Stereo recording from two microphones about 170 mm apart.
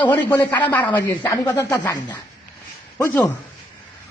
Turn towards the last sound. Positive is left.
turn(degrees=15)  # may be behind; listen again after turning